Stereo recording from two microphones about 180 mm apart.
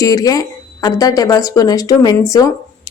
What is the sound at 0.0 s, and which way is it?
Speech, 20° left (ahead or behind).